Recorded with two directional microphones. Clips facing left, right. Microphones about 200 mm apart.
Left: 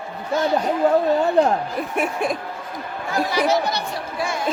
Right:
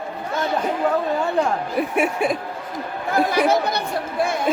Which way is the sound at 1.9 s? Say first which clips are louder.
Right 1 dB; 5° right (ahead or behind).